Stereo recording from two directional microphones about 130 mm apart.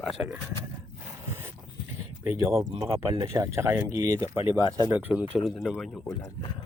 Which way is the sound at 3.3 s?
20° right (ahead or behind).